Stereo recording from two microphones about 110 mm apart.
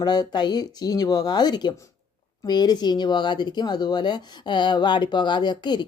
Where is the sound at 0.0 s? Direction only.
40° left (ahead or behind).